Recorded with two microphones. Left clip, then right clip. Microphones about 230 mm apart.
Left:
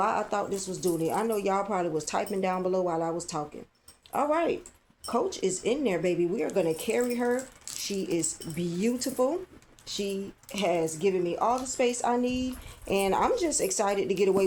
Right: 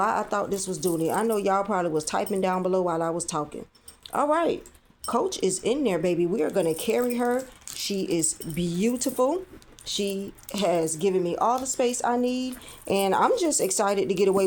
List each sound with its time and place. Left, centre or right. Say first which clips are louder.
0.0 s speech: right 3 dB; right